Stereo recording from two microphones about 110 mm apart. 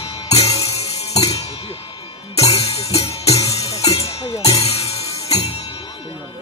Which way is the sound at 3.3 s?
30° left (ahead or behind).